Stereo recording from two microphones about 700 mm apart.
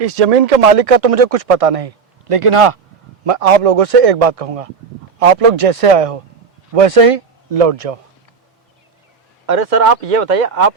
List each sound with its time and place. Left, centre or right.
0.0 s speech: right
9.5 s speech: right